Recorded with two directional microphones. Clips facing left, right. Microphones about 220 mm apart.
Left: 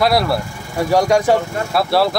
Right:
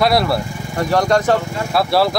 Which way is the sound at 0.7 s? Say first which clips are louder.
Left 1 dB; 10° left (ahead or behind).